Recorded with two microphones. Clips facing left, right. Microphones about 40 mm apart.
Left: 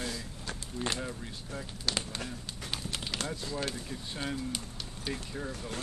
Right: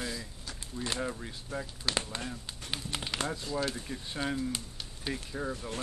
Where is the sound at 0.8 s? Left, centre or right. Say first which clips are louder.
Left 2 dB; left.